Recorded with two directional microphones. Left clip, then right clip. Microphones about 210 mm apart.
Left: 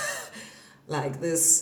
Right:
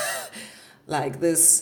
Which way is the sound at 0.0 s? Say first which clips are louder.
Right 3 dB; 50° right (ahead or behind).